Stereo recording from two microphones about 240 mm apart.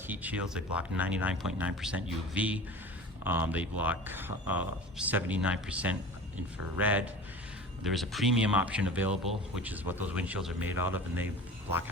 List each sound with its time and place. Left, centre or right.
0.1 s speech: centre